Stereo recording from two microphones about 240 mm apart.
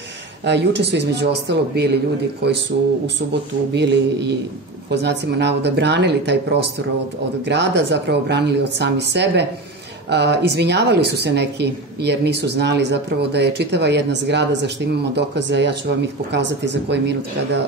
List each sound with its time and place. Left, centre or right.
0.5 s a woman's voice: right
7.4 s a woman's voice: right